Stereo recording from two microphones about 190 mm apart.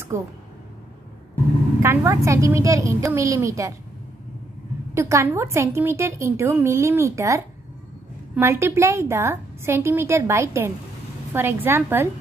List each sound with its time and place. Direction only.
1.8 s a woman's voice: 15° right (ahead or behind)
4.9 s a woman's voice: 15° right (ahead or behind)